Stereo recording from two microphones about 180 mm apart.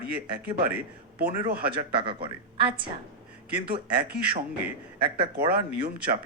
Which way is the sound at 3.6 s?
60° right (ahead or behind).